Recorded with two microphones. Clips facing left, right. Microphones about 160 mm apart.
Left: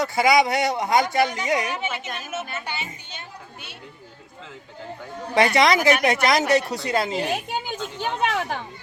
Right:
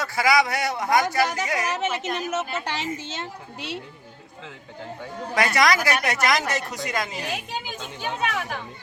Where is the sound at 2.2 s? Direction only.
90° right.